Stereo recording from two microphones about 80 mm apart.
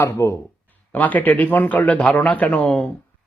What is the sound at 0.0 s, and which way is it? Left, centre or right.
Speech, left.